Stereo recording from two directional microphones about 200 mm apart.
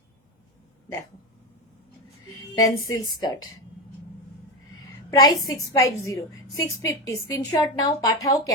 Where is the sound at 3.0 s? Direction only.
20° left (ahead or behind).